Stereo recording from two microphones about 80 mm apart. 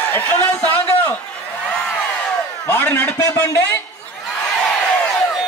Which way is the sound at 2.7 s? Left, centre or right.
Left.